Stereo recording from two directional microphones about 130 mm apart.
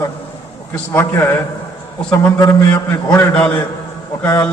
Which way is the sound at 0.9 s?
20° left (ahead or behind).